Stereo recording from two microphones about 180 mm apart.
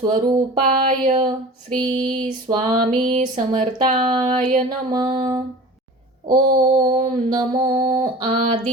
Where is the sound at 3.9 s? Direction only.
25° right (ahead or behind).